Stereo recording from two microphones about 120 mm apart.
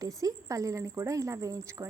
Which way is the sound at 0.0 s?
30° right (ahead or behind).